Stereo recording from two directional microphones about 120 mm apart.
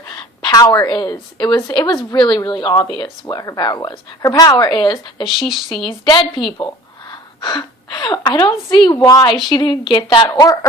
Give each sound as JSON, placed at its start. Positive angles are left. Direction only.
{"t": 0.1, "sound": "a woman's voice", "side_deg": 35}
{"t": 5.4, "sound": "speech", "side_deg": 0}
{"t": 5.7, "sound": "a woman's voice", "side_deg": 45}